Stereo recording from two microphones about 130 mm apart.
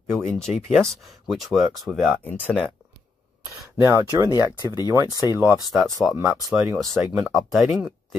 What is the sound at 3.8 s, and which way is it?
Speech, 25° right (ahead or behind).